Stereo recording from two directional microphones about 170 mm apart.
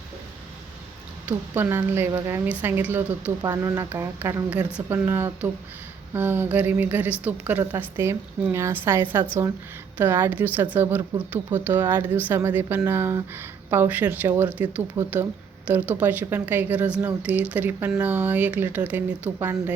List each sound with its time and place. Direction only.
1.3 s speech: 10° right (ahead or behind)